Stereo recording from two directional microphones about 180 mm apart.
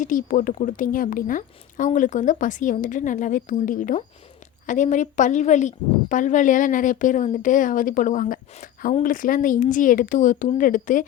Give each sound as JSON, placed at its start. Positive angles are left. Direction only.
{"t": 0.0, "sound": "speech", "side_deg": 50}